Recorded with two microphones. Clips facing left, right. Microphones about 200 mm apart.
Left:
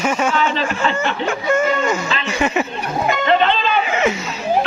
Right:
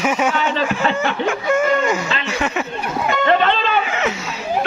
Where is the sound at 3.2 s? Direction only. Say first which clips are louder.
Even; 50° right (ahead or behind).